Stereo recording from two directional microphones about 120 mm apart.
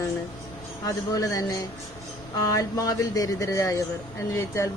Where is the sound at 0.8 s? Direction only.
30° left (ahead or behind).